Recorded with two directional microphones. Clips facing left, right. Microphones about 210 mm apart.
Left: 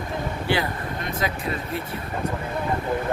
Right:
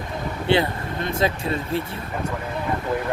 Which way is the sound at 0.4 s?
25° right (ahead or behind).